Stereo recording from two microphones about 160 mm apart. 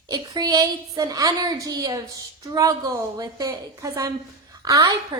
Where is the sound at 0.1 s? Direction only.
25° right (ahead or behind).